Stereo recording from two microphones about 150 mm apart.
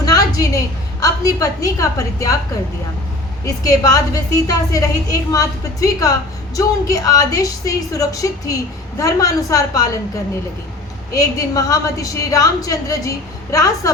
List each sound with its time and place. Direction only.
0.0 s a woman's voice: 25° left (ahead or behind)
3.4 s a woman's voice: 25° left (ahead or behind)
11.1 s a woman's voice: 20° left (ahead or behind)